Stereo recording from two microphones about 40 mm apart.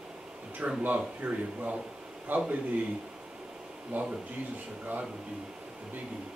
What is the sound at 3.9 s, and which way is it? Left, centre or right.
Speech, right.